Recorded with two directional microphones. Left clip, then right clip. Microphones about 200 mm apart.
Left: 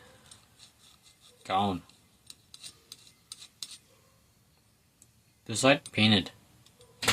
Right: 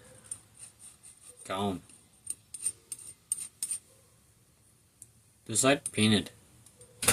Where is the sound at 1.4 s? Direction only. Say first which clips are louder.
Left 5 dB; 30° left (ahead or behind).